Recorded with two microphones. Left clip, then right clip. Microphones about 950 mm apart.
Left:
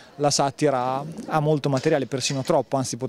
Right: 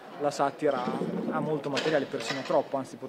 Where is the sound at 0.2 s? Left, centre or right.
Left.